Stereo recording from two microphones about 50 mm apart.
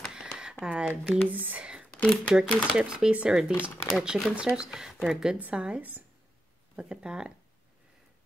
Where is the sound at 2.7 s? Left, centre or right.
Centre.